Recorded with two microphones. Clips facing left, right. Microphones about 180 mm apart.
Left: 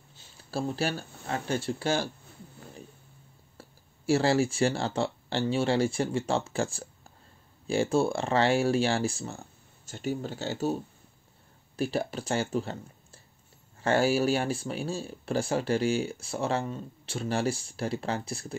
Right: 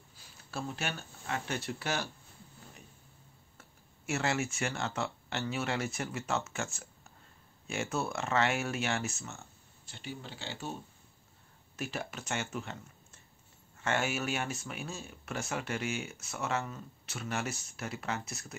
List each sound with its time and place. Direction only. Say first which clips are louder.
0.1 s speech: left 7 dB; 30° left (ahead or behind)
3.5 s speech: left 10 dB; 30° left (ahead or behind)